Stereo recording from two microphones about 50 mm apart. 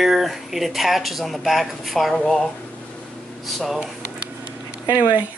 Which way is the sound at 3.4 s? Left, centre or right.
Centre.